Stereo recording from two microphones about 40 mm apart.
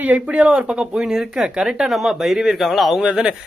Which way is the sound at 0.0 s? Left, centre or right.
Right.